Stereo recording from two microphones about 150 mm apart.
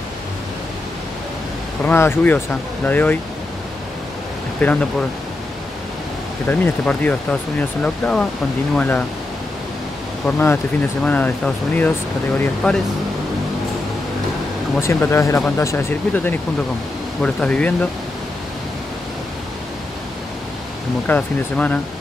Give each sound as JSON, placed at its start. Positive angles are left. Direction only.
{"t": 1.9, "sound": "speech", "side_deg": 15}
{"t": 4.6, "sound": "speech", "side_deg": 10}
{"t": 6.4, "sound": "speech", "side_deg": 10}
{"t": 10.2, "sound": "speech", "side_deg": 10}
{"t": 14.8, "sound": "speech", "side_deg": 15}
{"t": 21.1, "sound": "speech", "side_deg": 10}